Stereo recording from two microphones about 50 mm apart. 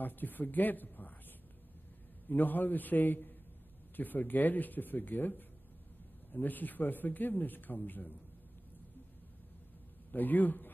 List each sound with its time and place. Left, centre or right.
0.0 s speech: left
2.2 s speech: left
10.1 s speech: left